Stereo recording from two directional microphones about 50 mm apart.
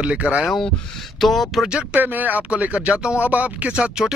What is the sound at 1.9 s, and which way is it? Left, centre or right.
Speech, right.